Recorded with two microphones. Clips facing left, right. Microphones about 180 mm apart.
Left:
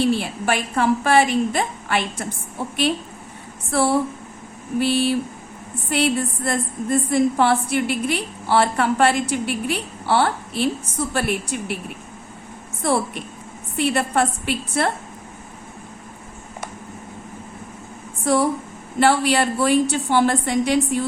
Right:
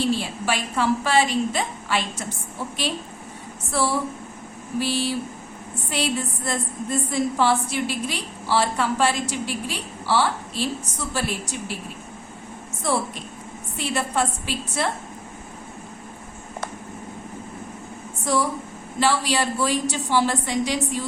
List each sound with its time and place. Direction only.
0.0 s a woman's voice: 55° left (ahead or behind)
3.7 s a woman's voice: 55° left (ahead or behind)
12.8 s a woman's voice: 60° left (ahead or behind)
18.9 s a woman's voice: 60° left (ahead or behind)